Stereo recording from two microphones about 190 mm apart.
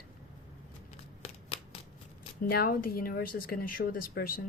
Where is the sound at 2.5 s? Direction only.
50° left (ahead or behind).